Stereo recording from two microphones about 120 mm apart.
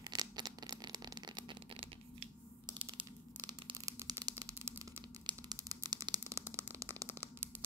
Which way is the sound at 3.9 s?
30° right (ahead or behind).